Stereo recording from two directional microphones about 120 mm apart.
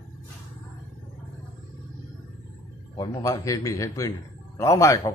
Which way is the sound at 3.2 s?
25° left (ahead or behind).